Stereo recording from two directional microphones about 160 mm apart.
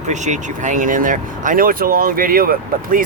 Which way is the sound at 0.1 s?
50° right (ahead or behind).